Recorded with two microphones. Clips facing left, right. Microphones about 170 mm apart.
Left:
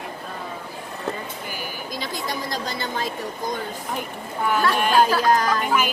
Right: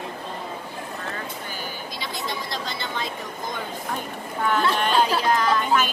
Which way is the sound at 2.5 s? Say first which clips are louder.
Left 3 dB; 45° left (ahead or behind).